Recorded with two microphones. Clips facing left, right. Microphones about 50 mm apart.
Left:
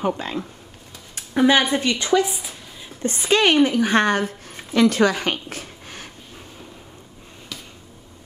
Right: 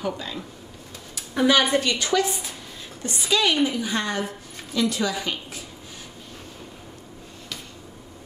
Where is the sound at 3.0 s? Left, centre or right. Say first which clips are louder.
Left 5 dB; left.